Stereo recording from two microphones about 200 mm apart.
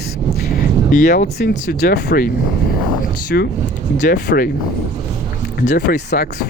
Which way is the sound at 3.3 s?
50° left (ahead or behind).